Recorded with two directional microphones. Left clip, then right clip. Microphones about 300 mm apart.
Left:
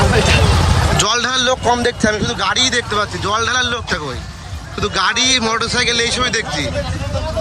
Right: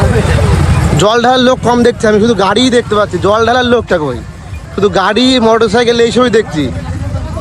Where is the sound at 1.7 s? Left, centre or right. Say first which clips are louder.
Right 7 dB; right.